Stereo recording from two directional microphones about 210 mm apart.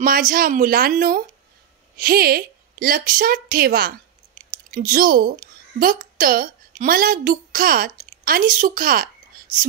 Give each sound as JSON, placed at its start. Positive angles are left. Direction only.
{"t": 0.0, "sound": "a woman's voice", "side_deg": -40}